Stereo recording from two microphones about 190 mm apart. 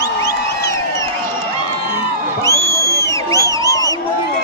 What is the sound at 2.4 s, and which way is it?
Crowd, 15° left (ahead or behind).